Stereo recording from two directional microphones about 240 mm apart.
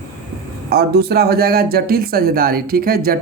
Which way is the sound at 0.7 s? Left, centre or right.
Right.